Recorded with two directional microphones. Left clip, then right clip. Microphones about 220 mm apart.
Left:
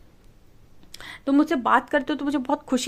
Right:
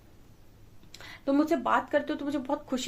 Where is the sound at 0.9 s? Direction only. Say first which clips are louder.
Left 5 dB; 45° left (ahead or behind).